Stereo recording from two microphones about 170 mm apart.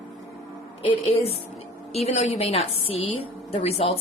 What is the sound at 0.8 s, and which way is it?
A woman's voice, 35° left (ahead or behind).